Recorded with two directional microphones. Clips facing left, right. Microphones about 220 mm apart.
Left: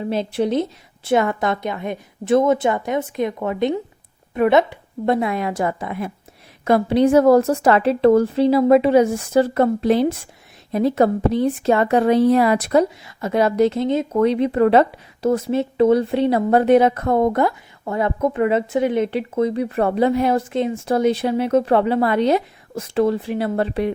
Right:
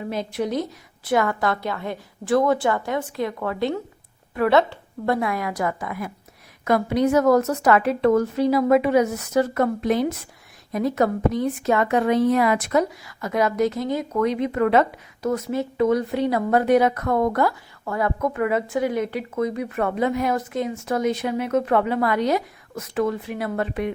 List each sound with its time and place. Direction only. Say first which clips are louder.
0.0 s a woman's voice: left 5 dB; 30° left (ahead or behind)